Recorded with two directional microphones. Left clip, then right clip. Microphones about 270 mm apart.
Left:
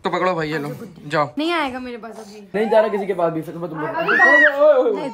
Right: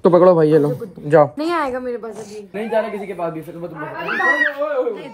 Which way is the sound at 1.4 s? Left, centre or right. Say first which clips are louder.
Right 1 dB; left.